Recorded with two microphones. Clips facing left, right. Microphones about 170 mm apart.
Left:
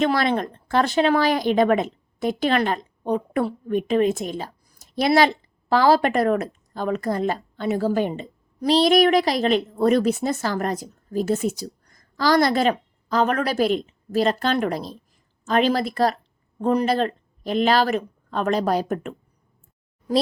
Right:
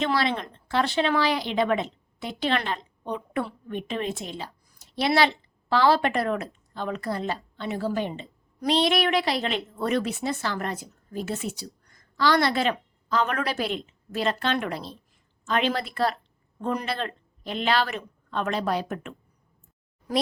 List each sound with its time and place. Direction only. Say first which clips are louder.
0.0 s speech: left 5 dB; 45° left (ahead or behind)